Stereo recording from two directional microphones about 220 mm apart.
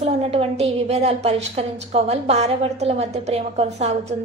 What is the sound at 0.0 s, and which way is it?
A woman's voice, 30° right (ahead or behind).